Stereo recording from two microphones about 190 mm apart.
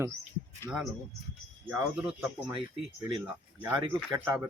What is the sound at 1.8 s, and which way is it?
Speech, 5° right (ahead or behind).